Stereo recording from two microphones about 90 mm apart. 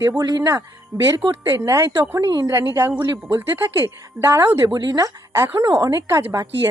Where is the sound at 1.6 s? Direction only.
35° right (ahead or behind).